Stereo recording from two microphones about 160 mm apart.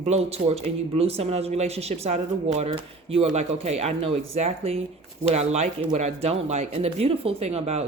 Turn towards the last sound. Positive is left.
turn(degrees=-40)  # may be behind; listen again after turning